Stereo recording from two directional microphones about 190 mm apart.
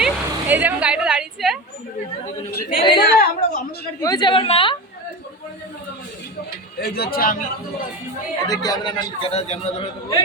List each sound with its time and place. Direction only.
0.0 s vehicle: 10° right (ahead or behind)
2.5 s a woman's voice: 50° left (ahead or behind)
4.0 s a man's voice: 20° left (ahead or behind)
6.8 s speech: 55° left (ahead or behind)
8.4 s a man's voice: 20° left (ahead or behind)